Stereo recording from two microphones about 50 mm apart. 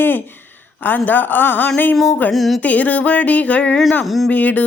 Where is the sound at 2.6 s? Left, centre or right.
Left.